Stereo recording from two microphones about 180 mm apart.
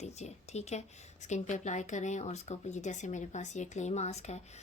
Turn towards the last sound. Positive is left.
turn(degrees=40)  # may be behind; listen again after turning